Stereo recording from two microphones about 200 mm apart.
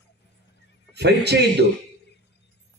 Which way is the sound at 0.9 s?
55° right (ahead or behind).